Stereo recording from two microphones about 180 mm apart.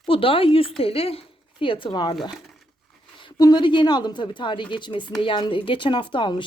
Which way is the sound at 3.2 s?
20° left (ahead or behind).